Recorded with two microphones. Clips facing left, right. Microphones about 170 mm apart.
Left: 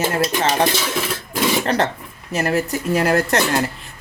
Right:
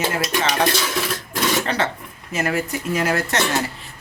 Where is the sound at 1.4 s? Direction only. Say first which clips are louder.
Left 2 dB; 10° left (ahead or behind).